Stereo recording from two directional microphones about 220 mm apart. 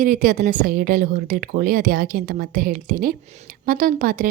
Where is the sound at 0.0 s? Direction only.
40° right (ahead or behind).